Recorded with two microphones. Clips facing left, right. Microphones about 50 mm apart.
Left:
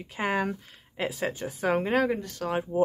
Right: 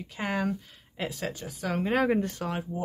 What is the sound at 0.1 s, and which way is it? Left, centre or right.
Speech, centre.